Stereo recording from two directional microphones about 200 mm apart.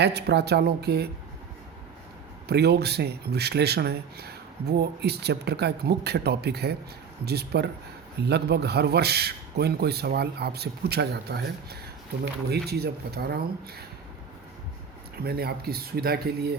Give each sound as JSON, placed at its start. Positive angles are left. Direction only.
{"t": 0.0, "sound": "speech", "side_deg": -55}
{"t": 2.5, "sound": "a man's voice", "side_deg": -55}
{"t": 15.2, "sound": "a man's voice", "side_deg": -50}